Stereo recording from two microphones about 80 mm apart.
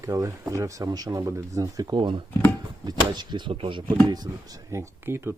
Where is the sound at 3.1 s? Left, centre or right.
Right.